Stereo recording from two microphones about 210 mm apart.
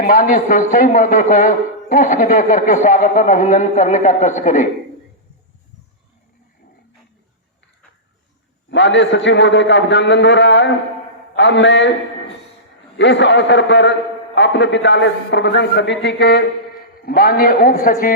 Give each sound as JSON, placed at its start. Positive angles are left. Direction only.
{"t": 0.0, "sound": "a man's voice", "side_deg": 40}
{"t": 8.7, "sound": "a man's voice", "side_deg": 60}
{"t": 13.0, "sound": "a man's voice", "side_deg": 60}